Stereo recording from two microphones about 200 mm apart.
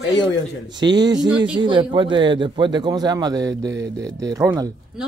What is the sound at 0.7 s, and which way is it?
Speech, 20° right (ahead or behind).